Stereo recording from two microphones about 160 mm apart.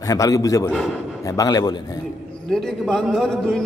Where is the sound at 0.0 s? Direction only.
20° left (ahead or behind).